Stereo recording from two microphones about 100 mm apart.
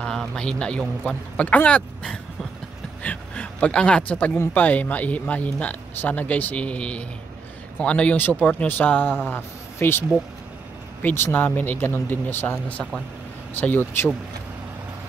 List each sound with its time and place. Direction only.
0.0 s a man's voice: 5° left (ahead or behind); by 14.1 s 20° left (ahead or behind)